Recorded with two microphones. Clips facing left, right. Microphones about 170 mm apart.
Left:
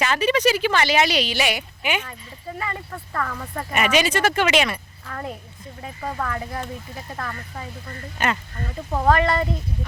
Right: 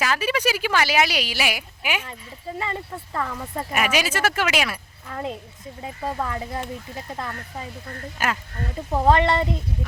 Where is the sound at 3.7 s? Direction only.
5° right (ahead or behind).